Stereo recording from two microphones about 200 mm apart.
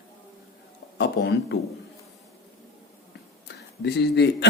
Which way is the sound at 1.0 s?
55° left (ahead or behind).